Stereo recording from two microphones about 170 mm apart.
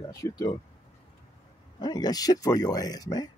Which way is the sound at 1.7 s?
25° left (ahead or behind).